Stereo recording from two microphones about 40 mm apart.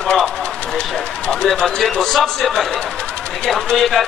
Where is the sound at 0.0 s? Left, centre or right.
Left.